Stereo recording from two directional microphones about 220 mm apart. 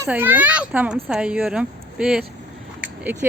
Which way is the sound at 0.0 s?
10° right (ahead or behind).